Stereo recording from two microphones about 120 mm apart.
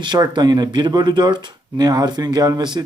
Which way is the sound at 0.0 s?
40° right (ahead or behind).